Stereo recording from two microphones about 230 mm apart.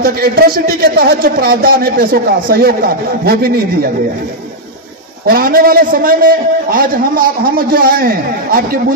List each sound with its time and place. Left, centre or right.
0.0 s a man's voice: right
5.2 s a man's voice: right